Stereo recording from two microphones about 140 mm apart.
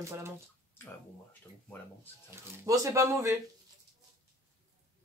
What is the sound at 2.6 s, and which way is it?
Speech, 25° right (ahead or behind).